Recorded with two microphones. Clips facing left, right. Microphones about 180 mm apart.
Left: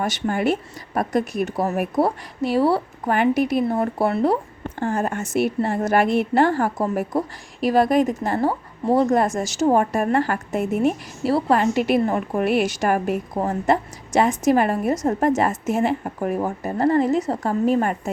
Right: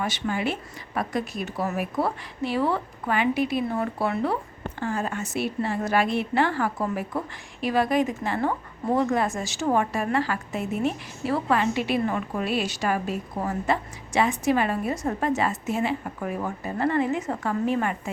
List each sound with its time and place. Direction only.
0.0 s a woman's voice: 50° left (ahead or behind)
2.0 s a woman's voice: 40° left (ahead or behind)
3.1 s a woman's voice: 45° left (ahead or behind)
11.3 s a woman's voice: 35° left (ahead or behind)